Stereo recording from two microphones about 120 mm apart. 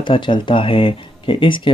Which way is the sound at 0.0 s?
40° left (ahead or behind).